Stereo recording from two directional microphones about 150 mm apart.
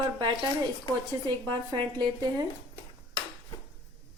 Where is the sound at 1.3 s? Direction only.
30° right (ahead or behind).